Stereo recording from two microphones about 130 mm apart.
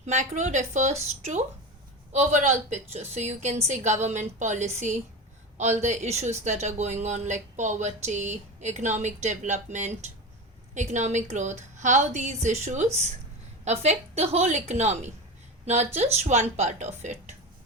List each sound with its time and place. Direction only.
0.0 s speech: 65° right (ahead or behind)